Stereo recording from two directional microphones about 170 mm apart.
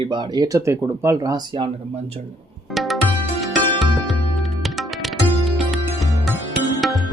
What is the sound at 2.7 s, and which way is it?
Music, centre (ahead or behind).